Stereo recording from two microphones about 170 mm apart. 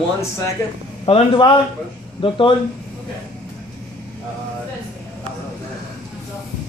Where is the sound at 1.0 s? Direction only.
30° left (ahead or behind).